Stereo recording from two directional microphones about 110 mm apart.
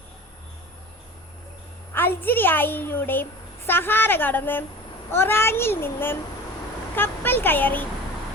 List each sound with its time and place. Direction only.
1.9 s a woman's voice: 20° left (ahead or behind)